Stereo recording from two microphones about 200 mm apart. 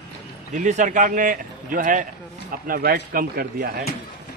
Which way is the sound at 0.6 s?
40° right (ahead or behind).